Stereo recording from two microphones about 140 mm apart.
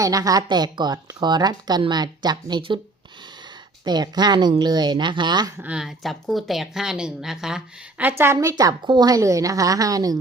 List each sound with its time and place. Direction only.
0.0 s a woman's voice: 25° right (ahead or behind)
3.8 s speech: 30° right (ahead or behind)
5.6 s speech: 5° right (ahead or behind)
8.2 s a woman's voice: 20° right (ahead or behind)